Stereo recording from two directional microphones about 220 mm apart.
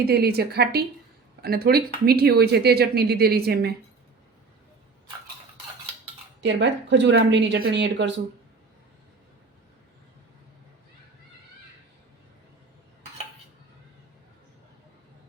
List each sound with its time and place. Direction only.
0.0 s speech: 45° right (ahead or behind)
6.4 s speech: 55° right (ahead or behind)